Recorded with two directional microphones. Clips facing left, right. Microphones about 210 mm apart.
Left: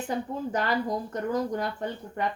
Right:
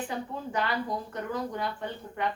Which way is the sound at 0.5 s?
40° left (ahead or behind).